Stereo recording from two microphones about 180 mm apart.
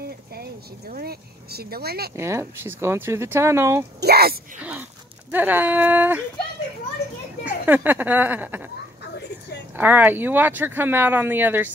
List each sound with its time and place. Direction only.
0.3 s speech: 60° right (ahead or behind)
2.1 s speech: 15° right (ahead or behind)
4.0 s speech: 60° right (ahead or behind)
4.6 s speech: 10° right (ahead or behind)
7.4 s speech: 10° right (ahead or behind)
9.8 s speech: 10° right (ahead or behind)